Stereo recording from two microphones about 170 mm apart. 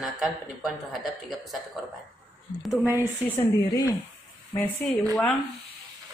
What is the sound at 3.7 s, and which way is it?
Speech, 20° left (ahead or behind).